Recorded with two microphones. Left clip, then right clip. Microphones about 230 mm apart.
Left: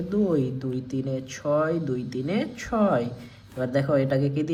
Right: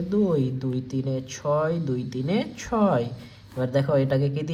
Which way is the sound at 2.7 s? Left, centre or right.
Right.